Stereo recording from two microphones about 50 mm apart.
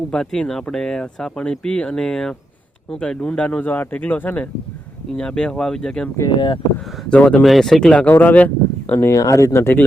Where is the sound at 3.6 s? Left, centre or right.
Left.